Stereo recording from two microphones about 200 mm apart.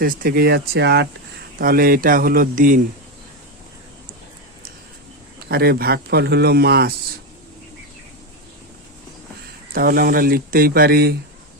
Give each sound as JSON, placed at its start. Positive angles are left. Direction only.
{"t": 0.0, "sound": "speech", "side_deg": -45}
{"t": 5.5, "sound": "speech", "side_deg": -50}
{"t": 9.7, "sound": "speech", "side_deg": -45}